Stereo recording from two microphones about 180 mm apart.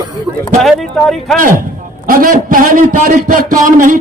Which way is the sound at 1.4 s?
50° right (ahead or behind).